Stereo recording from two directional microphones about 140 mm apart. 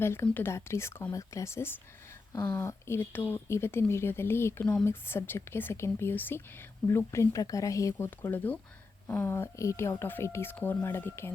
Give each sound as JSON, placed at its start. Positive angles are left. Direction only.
{"t": 0.0, "sound": "speech", "side_deg": 15}